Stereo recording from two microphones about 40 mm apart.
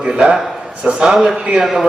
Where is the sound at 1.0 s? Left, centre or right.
Centre.